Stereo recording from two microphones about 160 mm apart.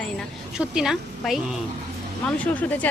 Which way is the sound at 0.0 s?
Centre (ahead or behind).